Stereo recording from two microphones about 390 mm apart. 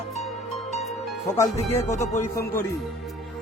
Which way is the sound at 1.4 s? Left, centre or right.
Centre.